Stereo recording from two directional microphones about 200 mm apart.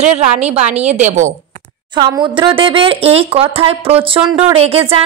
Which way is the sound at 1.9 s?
20° right (ahead or behind).